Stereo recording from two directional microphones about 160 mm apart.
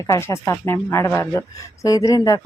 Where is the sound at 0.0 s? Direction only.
20° left (ahead or behind).